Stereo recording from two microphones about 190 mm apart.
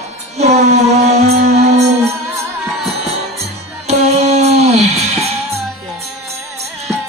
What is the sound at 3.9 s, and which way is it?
Music, 35° right (ahead or behind).